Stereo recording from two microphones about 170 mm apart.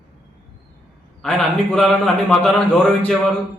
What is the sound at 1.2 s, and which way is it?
A man's voice, 5° left (ahead or behind).